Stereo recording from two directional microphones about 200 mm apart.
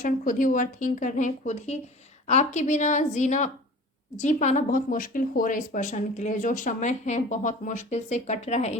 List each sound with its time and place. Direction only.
0.0 s speech: 40° left (ahead or behind)